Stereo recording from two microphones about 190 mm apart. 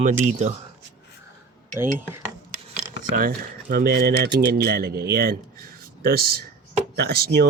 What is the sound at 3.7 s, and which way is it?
Speech, 55° right (ahead or behind).